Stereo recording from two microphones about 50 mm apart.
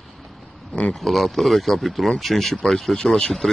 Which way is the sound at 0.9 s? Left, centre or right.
Centre.